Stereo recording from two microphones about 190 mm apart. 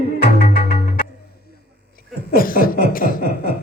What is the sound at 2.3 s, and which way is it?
Chuckle, 50° left (ahead or behind).